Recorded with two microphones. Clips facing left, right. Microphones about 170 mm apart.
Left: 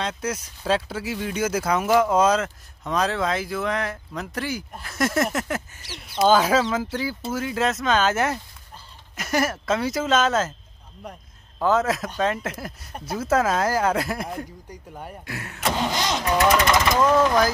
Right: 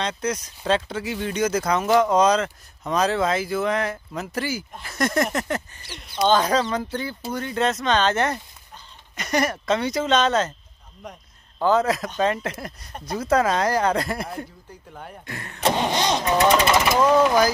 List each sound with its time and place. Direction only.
0.0 s speech: 5° left (ahead or behind)
11.6 s speech: centre (ahead or behind)
15.6 s vehicle: 25° right (ahead or behind)
16.7 s speech: 5° right (ahead or behind)